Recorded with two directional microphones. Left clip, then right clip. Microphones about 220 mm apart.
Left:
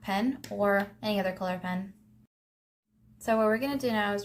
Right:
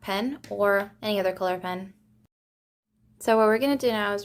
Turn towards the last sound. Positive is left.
turn(degrees=-45)  # may be behind; listen again after turning